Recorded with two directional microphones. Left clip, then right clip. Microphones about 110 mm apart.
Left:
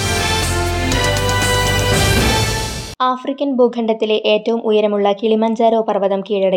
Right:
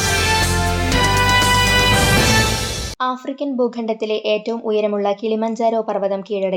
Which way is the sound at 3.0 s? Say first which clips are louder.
Left 6 dB; 35° left (ahead or behind).